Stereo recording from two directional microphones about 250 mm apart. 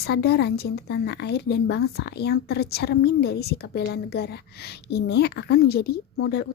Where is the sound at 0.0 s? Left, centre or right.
Left.